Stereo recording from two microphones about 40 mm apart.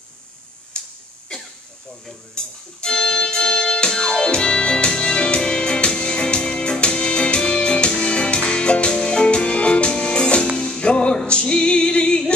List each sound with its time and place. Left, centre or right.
0.7 s finger snapping: left
2.3 s music: centre